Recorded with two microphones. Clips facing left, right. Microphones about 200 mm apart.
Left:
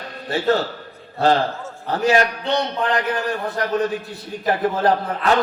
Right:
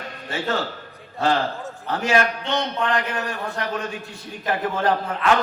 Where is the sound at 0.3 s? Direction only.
35° left (ahead or behind).